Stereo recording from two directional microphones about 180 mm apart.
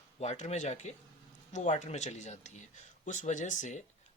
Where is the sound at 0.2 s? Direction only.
40° left (ahead or behind).